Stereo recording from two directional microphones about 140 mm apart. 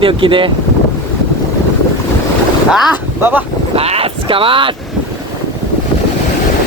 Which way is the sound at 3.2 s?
15° right (ahead or behind).